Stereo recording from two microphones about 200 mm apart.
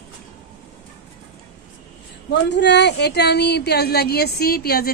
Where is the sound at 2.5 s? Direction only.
60° left (ahead or behind).